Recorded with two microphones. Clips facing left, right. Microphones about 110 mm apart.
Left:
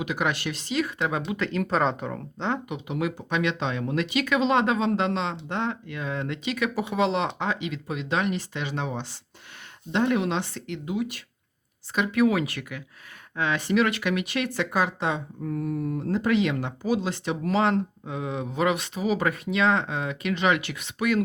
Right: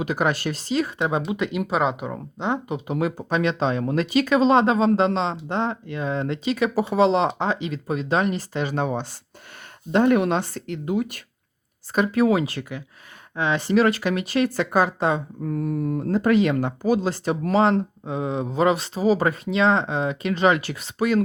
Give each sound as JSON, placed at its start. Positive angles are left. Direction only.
{"t": 0.0, "sound": "speech", "side_deg": -40}
{"t": 1.3, "sound": "speech", "side_deg": -15}
{"t": 2.6, "sound": "speech", "side_deg": -35}
{"t": 11.9, "sound": "speech", "side_deg": -35}